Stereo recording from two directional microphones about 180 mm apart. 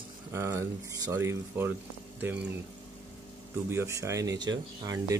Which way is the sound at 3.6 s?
15° right (ahead or behind).